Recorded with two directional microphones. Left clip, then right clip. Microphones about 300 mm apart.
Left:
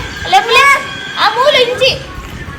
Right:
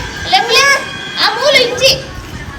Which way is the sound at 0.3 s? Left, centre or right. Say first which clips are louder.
Left 2 dB; centre.